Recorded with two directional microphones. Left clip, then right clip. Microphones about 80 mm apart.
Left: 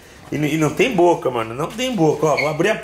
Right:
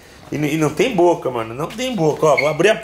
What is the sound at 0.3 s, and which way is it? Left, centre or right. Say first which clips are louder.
Speech: right 1 dB; centre.